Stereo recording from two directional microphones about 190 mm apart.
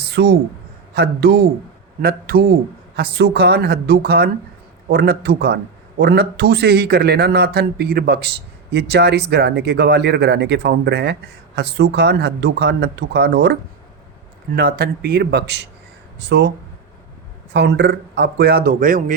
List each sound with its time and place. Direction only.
0.1 s a man's voice: 60° right (ahead or behind)
17.5 s a man's voice: 65° right (ahead or behind); by 19.1 s 45° right (ahead or behind)